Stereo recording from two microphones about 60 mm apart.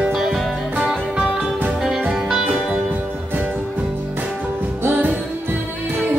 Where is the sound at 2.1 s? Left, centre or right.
Centre.